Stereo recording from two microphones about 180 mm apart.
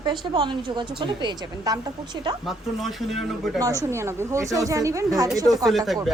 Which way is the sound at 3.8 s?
15° right (ahead or behind).